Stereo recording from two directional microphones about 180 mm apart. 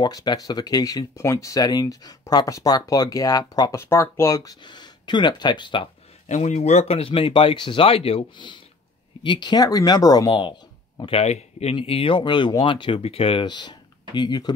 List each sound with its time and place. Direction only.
0.0 s speech: 25° left (ahead or behind)
6.2 s speech: 40° left (ahead or behind); by 14.5 s 25° left (ahead or behind)